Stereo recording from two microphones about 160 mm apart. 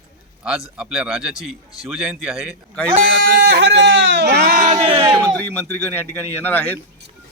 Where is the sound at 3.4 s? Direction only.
90° right.